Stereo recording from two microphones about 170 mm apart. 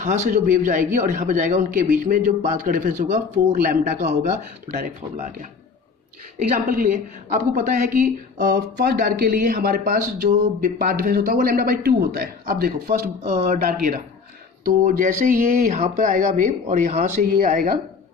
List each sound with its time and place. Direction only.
0.0 s speech: 45° right (ahead or behind)
6.7 s a woman's voice: 50° right (ahead or behind)
13.2 s speech: 40° right (ahead or behind)
13.5 s a woman's voice: 60° right (ahead or behind)